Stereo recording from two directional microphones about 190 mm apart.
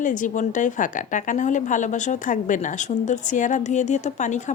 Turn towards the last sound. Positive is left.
turn(degrees=40)  # may be behind; listen again after turning